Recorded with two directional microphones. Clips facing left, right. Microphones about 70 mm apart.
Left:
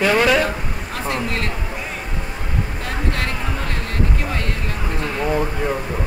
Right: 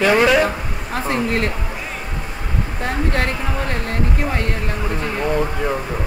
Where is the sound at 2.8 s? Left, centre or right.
Right.